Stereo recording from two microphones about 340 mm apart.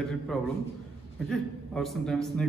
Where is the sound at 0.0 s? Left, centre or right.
Centre.